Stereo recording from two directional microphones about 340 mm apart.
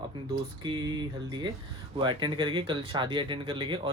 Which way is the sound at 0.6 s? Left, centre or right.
Centre.